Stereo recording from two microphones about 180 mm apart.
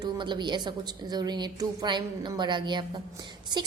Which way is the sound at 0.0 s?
25° right (ahead or behind).